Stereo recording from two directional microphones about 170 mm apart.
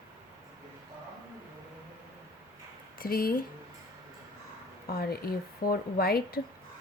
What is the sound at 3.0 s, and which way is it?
Speech, 60° left (ahead or behind).